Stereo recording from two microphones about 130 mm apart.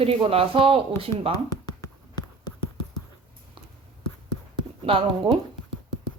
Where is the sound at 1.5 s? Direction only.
30° left (ahead or behind).